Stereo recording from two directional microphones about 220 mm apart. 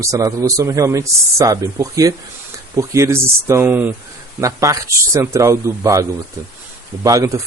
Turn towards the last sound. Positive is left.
turn(degrees=-15)  # may be behind; listen again after turning